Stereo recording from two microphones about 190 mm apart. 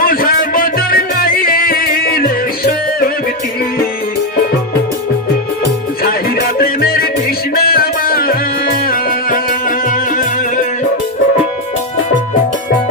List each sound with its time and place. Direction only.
0.0 s music: 50° left (ahead or behind)
6.6 s music: 50° left (ahead or behind)